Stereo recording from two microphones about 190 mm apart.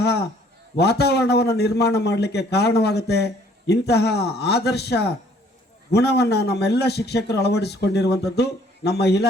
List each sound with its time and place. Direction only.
0.0 s a man's voice: 60° left (ahead or behind)